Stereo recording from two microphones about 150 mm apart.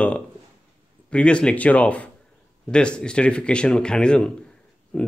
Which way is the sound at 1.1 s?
5° left (ahead or behind).